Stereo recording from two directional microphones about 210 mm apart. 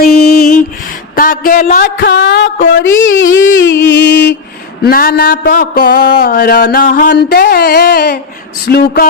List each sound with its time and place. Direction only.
0.2 s music: 50° left (ahead or behind)
1.1 s speech: 40° left (ahead or behind); by 4.4 s 55° left (ahead or behind)
4.8 s a sound: 45° left (ahead or behind)